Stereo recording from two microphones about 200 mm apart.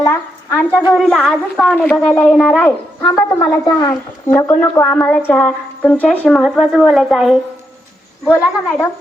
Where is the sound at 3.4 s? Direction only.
20° left (ahead or behind); by 7.4 s centre (ahead or behind).